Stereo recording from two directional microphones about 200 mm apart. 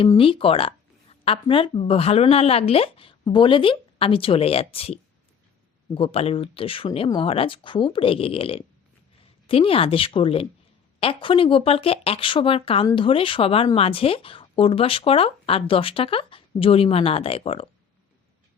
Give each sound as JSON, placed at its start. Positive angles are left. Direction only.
{"t": 0.0, "sound": "speech", "side_deg": 25}